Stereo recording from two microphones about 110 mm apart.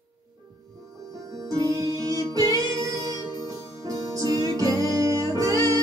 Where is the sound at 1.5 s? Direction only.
30° right (ahead or behind).